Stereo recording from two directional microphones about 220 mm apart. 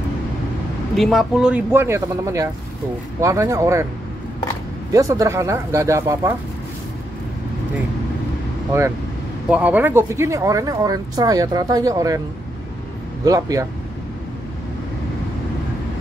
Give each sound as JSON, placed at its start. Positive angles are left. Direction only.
{"t": 0.9, "sound": "speech", "side_deg": 0}
{"t": 4.9, "sound": "speech", "side_deg": -15}
{"t": 8.7, "sound": "speech", "side_deg": -15}
{"t": 13.2, "sound": "speech", "side_deg": -15}